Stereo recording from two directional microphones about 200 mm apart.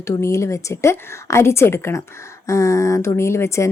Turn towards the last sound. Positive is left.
turn(degrees=15)  # may be behind; listen again after turning